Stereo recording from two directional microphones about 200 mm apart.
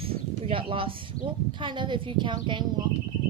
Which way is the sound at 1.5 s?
25° right (ahead or behind).